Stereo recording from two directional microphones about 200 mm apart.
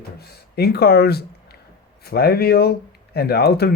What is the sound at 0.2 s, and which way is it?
Speech, 50° left (ahead or behind).